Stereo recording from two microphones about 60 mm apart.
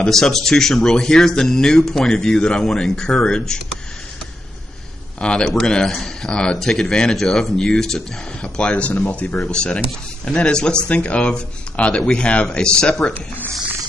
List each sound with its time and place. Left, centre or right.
0.0 s speech: centre
5.2 s speech: centre